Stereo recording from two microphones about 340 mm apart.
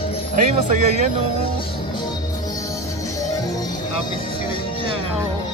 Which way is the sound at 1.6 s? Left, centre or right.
Centre.